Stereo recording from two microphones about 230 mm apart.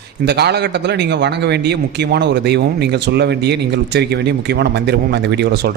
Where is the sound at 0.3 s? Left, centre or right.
Right.